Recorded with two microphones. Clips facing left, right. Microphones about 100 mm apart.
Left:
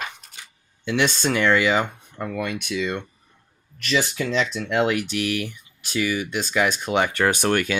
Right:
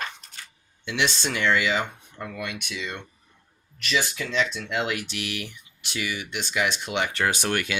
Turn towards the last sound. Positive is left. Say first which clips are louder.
# left 5 dB
turn(degrees=45)  # may be behind; listen again after turning